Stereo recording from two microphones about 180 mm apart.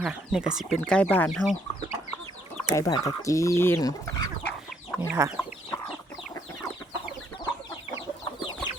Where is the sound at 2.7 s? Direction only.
20° left (ahead or behind).